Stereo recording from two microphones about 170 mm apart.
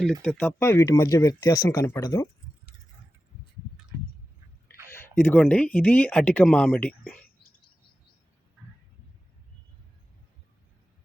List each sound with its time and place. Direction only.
0.0 s speech: centre (ahead or behind); by 2.2 s 25° left (ahead or behind)
4.9 s speech: 15° left (ahead or behind)